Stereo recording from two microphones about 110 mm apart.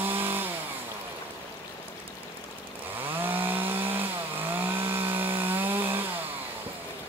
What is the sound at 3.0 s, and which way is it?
Chainsaw, 15° right (ahead or behind).